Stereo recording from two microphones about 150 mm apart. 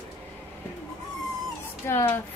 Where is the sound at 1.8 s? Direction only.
15° left (ahead or behind).